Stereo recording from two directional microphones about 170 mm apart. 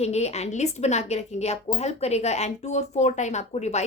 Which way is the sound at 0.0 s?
40° left (ahead or behind).